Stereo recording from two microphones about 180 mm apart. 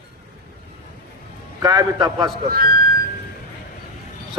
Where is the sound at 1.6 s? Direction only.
20° right (ahead or behind).